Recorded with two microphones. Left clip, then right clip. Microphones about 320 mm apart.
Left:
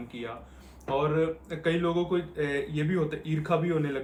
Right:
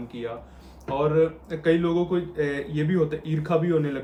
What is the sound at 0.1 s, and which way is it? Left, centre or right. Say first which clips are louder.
Speech: right 7 dB; centre.